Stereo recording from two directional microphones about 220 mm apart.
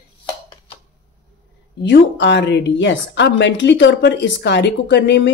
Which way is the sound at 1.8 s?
55° left (ahead or behind).